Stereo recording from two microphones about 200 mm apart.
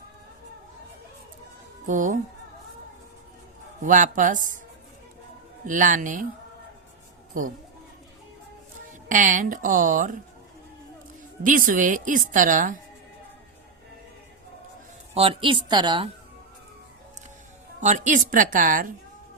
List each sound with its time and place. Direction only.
1.9 s speech: 40° right (ahead or behind)
3.8 s speech: 40° right (ahead or behind)
5.6 s speech: 40° right (ahead or behind)
8.9 s speech: 40° right (ahead or behind)
11.4 s speech: 45° right (ahead or behind)
15.1 s a woman's voice: 30° right (ahead or behind)
17.7 s speech: 40° right (ahead or behind)